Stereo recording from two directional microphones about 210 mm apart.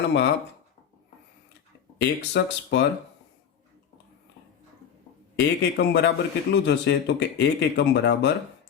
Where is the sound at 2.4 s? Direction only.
55° left (ahead or behind).